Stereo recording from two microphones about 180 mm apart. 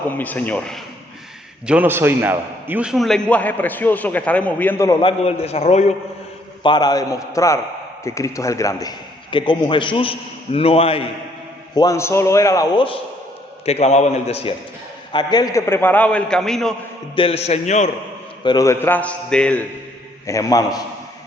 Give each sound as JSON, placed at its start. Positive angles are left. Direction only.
{"t": 0.2, "sound": "a man's voice", "side_deg": 10}
{"t": 1.6, "sound": "a man's voice", "side_deg": -10}
{"t": 4.9, "sound": "a man's voice", "side_deg": 30}
{"t": 6.6, "sound": "a man's voice", "side_deg": 25}
{"t": 11.7, "sound": "a man's voice", "side_deg": 20}
{"t": 15.1, "sound": "a man's voice", "side_deg": 25}
{"t": 17.2, "sound": "a man's voice", "side_deg": 35}
{"t": 18.4, "sound": "a man's voice", "side_deg": 20}
{"t": 20.2, "sound": "a man's voice", "side_deg": 15}